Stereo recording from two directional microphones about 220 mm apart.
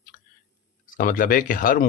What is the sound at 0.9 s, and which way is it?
Speech, 40° left (ahead or behind).